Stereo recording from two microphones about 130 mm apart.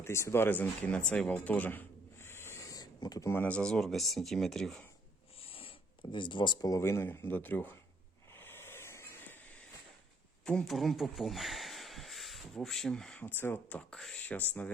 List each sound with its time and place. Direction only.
0.0 s speech: 20° left (ahead or behind); by 4.8 s 5° left (ahead or behind)
5.4 s speech: 45° left (ahead or behind); by 7.8 s 15° left (ahead or behind)
8.3 s a sound: 15° left (ahead or behind)
10.4 s speech: 5° left (ahead or behind)
13.2 s speech: 15° left (ahead or behind)